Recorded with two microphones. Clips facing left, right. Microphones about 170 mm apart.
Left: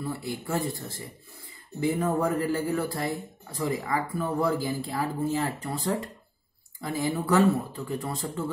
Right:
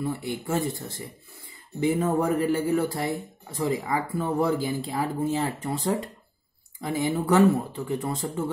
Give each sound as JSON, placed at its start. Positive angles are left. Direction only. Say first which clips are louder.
{"t": 0.0, "sound": "speech", "louder": "right 3 dB", "side_deg": -20}